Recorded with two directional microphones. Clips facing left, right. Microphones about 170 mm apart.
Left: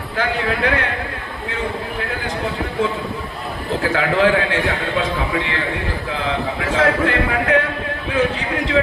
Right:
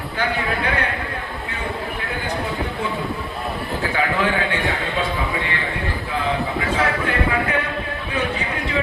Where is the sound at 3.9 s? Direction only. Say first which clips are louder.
Left 5 dB; 90° left.